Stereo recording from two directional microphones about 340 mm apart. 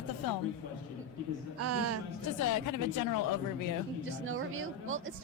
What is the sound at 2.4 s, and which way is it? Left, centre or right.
Speech, left.